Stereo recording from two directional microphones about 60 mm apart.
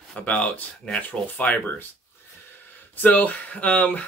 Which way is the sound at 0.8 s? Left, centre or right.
Centre.